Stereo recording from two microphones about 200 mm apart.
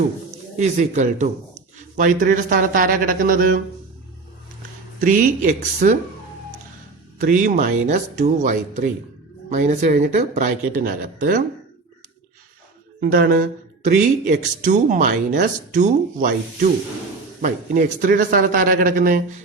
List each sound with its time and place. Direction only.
0.6 s speech: 35° right (ahead or behind)
4.9 s speech: 40° right (ahead or behind)
7.2 s speech: 40° right (ahead or behind)
13.0 s speech: 45° right (ahead or behind)